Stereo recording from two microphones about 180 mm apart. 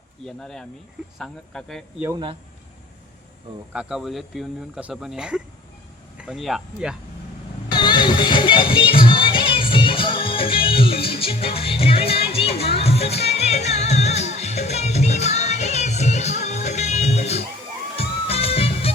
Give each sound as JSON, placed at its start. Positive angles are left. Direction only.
{"t": 0.3, "sound": "speech", "side_deg": 5}
{"t": 3.7, "sound": "speech", "side_deg": -5}
{"t": 7.7, "sound": "music", "side_deg": 25}